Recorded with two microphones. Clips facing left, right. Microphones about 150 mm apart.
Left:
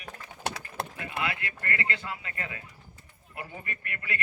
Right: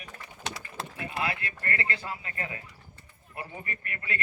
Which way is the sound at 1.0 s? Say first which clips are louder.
Right 3 dB; 30° right (ahead or behind).